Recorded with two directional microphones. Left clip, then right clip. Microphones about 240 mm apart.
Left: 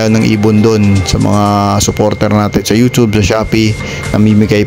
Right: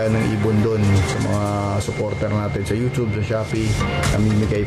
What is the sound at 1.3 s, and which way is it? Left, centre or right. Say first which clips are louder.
Speech: left 12 dB; left.